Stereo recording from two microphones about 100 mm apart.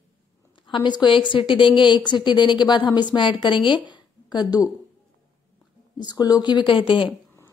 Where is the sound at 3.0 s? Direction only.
50° left (ahead or behind).